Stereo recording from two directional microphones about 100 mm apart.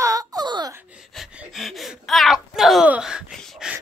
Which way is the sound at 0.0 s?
35° right (ahead or behind).